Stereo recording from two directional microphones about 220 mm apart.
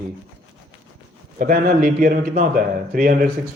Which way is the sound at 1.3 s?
40° right (ahead or behind).